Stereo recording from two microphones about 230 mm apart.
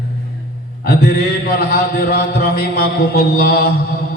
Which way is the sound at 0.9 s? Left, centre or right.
Left.